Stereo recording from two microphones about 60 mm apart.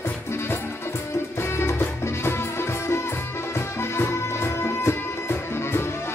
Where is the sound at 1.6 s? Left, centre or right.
Left.